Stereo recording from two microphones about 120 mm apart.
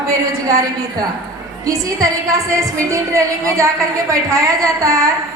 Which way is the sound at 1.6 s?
30° right (ahead or behind).